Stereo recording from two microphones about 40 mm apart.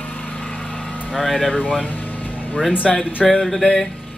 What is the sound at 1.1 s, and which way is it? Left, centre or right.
Speech, centre.